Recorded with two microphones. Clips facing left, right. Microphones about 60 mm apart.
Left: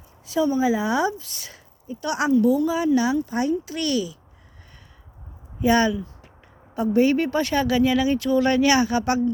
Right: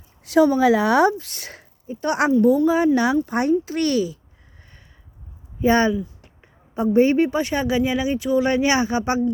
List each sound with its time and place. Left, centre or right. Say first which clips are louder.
0.3 s a woman's voice: right 5 dB; right
1.9 s speech: right 2 dB; right
5.5 s speech: right 2 dB; right
7.3 s speech: even; centre